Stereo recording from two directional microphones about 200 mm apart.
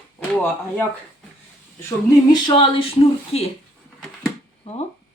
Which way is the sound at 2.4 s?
25° left (ahead or behind).